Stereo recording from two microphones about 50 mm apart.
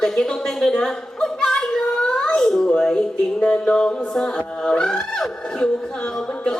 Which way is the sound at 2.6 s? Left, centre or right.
Centre.